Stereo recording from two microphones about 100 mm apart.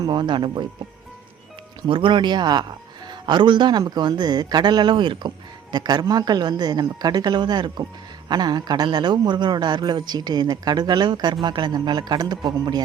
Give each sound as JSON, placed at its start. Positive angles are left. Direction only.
{"t": 0.0, "sound": "speech", "side_deg": -45}
{"t": 1.9, "sound": "speech", "side_deg": -55}